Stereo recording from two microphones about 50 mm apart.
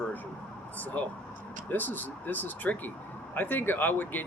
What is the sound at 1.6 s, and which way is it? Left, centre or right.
Speech, left.